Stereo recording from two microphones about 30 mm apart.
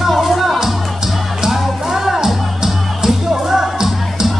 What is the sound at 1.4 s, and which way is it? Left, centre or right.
Music, centre.